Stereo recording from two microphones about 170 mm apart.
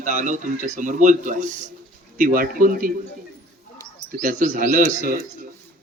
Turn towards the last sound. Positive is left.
turn(degrees=-55)  # may be behind; listen again after turning